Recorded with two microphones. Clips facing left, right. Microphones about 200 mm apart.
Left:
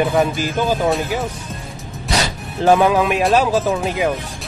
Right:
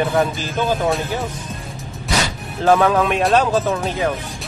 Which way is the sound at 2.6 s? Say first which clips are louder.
Left 1 dB; 15° left (ahead or behind).